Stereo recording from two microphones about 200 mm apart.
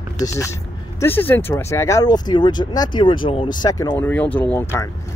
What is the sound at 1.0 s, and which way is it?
Speech, 10° left (ahead or behind).